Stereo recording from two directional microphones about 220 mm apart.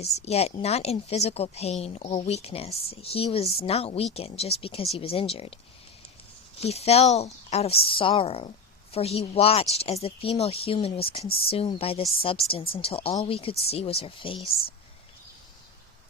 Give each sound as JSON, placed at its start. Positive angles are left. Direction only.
{"t": 0.0, "sound": "a woman's voice", "side_deg": 30}
{"t": 6.6, "sound": "a woman's voice", "side_deg": 30}